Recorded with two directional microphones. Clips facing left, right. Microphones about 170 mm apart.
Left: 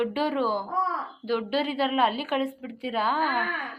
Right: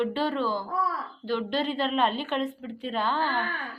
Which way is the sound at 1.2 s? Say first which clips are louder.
Left 2 dB; 10° left (ahead or behind).